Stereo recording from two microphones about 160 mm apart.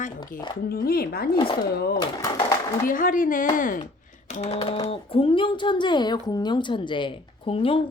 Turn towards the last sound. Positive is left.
turn(degrees=35)  # may be behind; listen again after turning